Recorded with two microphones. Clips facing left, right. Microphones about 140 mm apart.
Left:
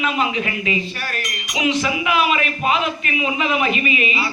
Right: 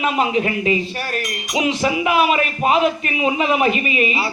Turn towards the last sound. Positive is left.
turn(degrees=-40)  # may be behind; listen again after turning